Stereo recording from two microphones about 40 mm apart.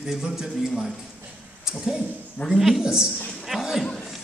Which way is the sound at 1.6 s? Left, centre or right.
Centre.